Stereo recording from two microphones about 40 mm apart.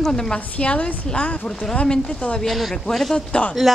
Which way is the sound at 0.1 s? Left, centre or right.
Centre.